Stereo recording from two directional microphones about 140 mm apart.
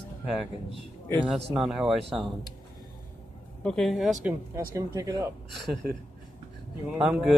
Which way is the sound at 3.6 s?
5° left (ahead or behind).